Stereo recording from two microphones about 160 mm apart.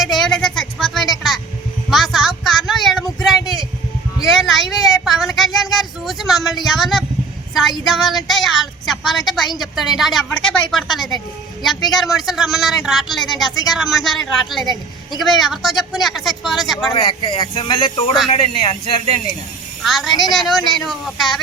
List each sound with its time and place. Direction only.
0.0 s a sound: centre (ahead or behind)
3.4 s vehicle: 25° left (ahead or behind)
4.4 s a sound: centre (ahead or behind)
7.9 s a woman's voice: centre (ahead or behind)
16.9 s speech: 35° left (ahead or behind)
19.8 s speech: centre (ahead or behind)